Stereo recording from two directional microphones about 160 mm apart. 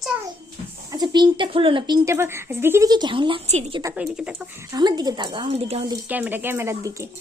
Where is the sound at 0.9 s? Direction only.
25° right (ahead or behind); by 3.8 s 45° right (ahead or behind).